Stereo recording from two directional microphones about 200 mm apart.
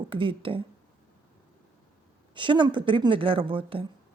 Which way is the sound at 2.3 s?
25° right (ahead or behind).